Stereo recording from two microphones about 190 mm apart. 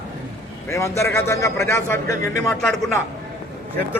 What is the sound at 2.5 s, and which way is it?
Speech, 5° left (ahead or behind).